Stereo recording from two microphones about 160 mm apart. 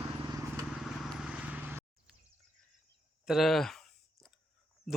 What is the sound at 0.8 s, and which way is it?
Vehicle, centre (ahead or behind).